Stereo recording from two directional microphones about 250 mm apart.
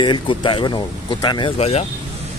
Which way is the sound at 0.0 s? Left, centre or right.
Centre.